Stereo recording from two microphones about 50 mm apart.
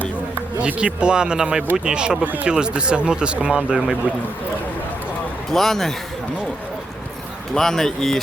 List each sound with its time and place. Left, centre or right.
0.8 s speech: right
2.2 s speech: right
2.5 s speech: centre
5.5 s a man's voice: centre
7.5 s a man's voice: centre